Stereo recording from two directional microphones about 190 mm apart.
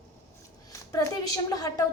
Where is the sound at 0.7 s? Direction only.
15° left (ahead or behind).